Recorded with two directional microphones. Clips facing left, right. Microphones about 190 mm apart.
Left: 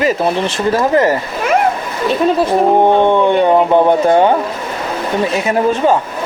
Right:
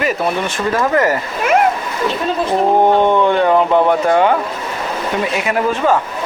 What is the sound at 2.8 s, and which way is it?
Speech, 20° left (ahead or behind).